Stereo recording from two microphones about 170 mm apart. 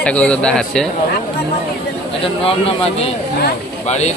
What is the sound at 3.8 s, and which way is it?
Speech, 40° left (ahead or behind).